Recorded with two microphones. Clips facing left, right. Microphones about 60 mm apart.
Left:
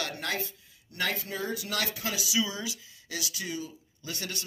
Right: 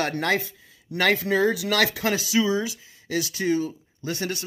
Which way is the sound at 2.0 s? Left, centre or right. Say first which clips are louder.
Right 8 dB; right.